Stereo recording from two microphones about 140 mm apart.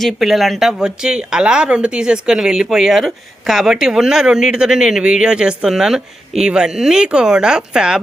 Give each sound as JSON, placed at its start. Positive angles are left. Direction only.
{"t": 0.0, "sound": "speech", "side_deg": 0}